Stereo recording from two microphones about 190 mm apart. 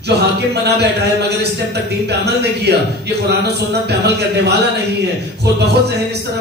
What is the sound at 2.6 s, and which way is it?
A man's voice, 60° right (ahead or behind).